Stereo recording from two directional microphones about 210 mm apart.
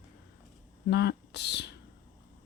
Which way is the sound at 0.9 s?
55° left (ahead or behind).